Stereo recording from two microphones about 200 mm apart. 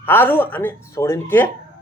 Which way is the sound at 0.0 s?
10° left (ahead or behind).